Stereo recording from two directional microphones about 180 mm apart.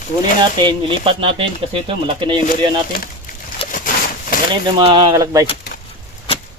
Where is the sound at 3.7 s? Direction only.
45° left (ahead or behind).